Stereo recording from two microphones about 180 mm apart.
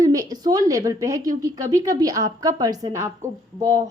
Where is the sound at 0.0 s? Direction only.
20° right (ahead or behind).